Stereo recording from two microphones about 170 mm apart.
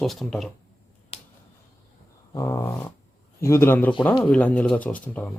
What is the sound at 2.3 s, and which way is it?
Dog, 20° left (ahead or behind).